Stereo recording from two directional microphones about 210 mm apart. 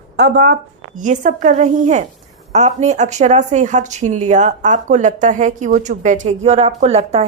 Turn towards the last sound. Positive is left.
turn(degrees=-30)  # may be behind; listen again after turning